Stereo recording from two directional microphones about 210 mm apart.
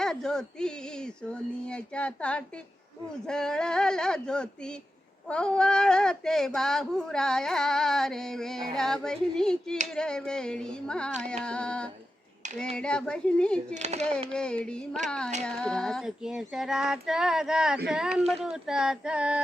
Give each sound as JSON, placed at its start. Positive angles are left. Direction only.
{"t": 0.0, "sound": "speech", "side_deg": 5}
{"t": 13.7, "sound": "speech", "side_deg": -30}
{"t": 14.3, "sound": "speech", "side_deg": 5}